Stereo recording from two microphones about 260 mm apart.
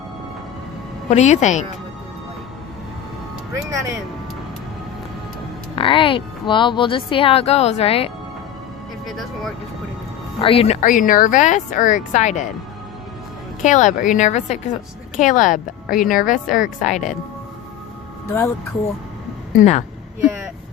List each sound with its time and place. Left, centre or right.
1.1 s a woman's voice: left
3.5 s speech: centre
5.7 s a woman's voice: centre
9.0 s speech: centre
10.4 s a woman's voice: left
13.7 s a woman's voice: left
18.3 s speech: centre
19.5 s a woman's voice: left